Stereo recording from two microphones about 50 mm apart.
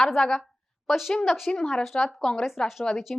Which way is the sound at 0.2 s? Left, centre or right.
Centre.